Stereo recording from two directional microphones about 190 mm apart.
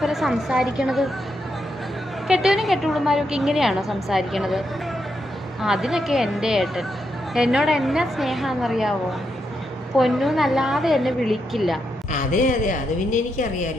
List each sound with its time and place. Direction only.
0.0 s a woman's voice: centre (ahead or behind)
2.2 s a woman's voice: centre (ahead or behind)
5.6 s a woman's voice: centre (ahead or behind)
10.0 s a woman's voice: centre (ahead or behind)
12.1 s a woman's voice: 40° left (ahead or behind)